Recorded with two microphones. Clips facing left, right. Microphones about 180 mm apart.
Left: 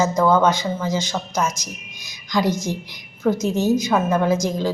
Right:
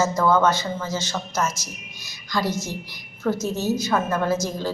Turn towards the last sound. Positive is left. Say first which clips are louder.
# left 4 dB
turn(degrees=15)  # may be behind; listen again after turning